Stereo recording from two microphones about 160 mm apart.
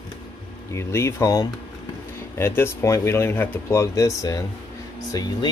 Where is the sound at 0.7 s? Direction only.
15° left (ahead or behind).